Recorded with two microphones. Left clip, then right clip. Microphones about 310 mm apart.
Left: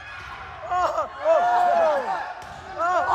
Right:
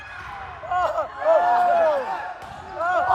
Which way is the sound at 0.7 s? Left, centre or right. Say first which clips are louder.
Even; left.